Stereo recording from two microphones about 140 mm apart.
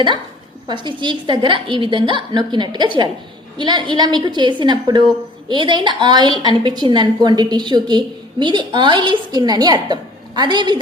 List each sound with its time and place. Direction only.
0.7 s a woman's voice: 35° right (ahead or behind)